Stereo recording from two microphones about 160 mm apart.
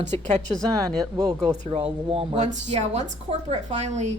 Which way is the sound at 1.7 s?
35° right (ahead or behind).